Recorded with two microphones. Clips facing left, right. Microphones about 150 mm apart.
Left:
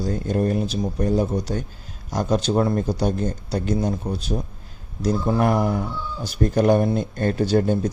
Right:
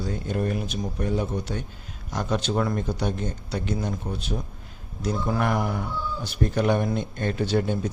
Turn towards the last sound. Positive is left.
turn(degrees=40)  # may be behind; listen again after turning